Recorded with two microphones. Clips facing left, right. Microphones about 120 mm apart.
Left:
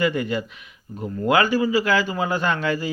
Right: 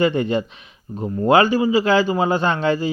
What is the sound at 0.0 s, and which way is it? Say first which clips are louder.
A man's voice: right 4 dB; 25° right (ahead or behind).